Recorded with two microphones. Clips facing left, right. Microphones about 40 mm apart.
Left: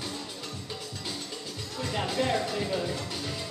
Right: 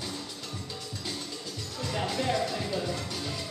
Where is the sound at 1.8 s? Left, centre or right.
Centre.